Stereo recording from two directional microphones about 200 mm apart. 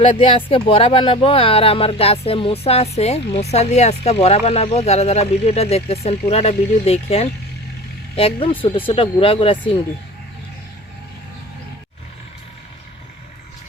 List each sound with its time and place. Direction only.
0.0 s speech: 30° left (ahead or behind)